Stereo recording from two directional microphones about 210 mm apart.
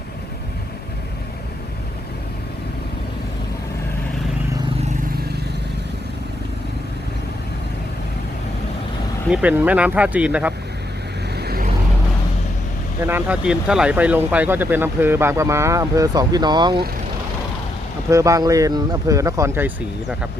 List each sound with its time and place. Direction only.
9.3 s speech: 5° right (ahead or behind)
11.3 s vehicle: 50° right (ahead or behind)
13.0 s speech: 10° right (ahead or behind)
18.1 s speech: 15° right (ahead or behind)